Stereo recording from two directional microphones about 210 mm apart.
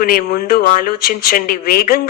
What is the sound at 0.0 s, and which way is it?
Speech, 45° left (ahead or behind).